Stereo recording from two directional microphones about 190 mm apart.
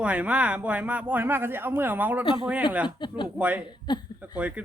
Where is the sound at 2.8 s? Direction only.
25° left (ahead or behind).